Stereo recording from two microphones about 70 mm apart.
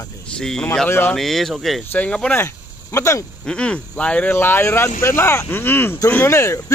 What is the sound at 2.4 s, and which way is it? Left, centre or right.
Speech, left.